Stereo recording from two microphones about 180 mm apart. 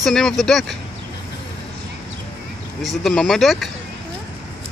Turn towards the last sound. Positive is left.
turn(degrees=0)  # may be behind; listen again after turning